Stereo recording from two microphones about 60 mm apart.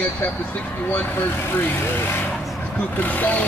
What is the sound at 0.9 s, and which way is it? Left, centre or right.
Speech, left.